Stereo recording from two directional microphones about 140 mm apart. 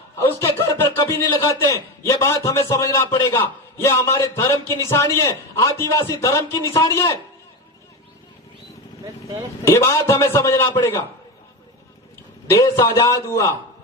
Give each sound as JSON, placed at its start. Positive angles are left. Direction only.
{"t": 0.2, "sound": "a sound", "side_deg": 20}
{"t": 1.4, "sound": "a man's voice", "side_deg": 20}
{"t": 9.0, "sound": "speech", "side_deg": -20}
{"t": 9.6, "sound": "a man's voice", "side_deg": 20}
{"t": 12.5, "sound": "a man's voice", "side_deg": 20}